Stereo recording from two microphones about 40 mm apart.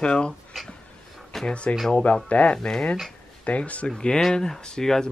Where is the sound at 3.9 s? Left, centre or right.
Centre.